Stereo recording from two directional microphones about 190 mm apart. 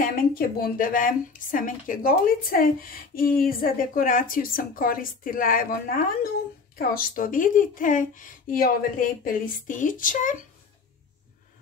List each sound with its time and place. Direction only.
0.0 s speech: 50° left (ahead or behind)